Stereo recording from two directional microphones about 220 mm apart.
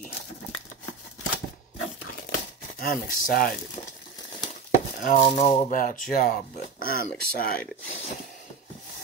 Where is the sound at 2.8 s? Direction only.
40° left (ahead or behind).